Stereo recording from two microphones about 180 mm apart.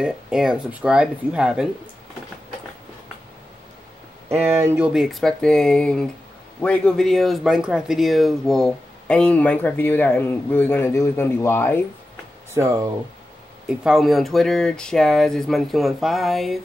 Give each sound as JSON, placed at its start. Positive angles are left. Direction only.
{"t": 0.0, "sound": "speech", "side_deg": -5}
{"t": 4.3, "sound": "speech", "side_deg": -10}
{"t": 12.5, "sound": "speech", "side_deg": -15}
{"t": 13.7, "sound": "speech", "side_deg": 0}